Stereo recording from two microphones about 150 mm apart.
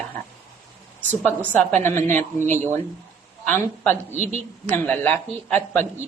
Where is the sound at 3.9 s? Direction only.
50° right (ahead or behind).